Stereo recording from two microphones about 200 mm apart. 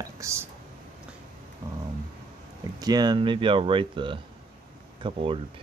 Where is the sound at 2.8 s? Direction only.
20° right (ahead or behind).